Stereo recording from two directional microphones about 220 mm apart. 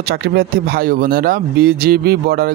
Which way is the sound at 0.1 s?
45° right (ahead or behind).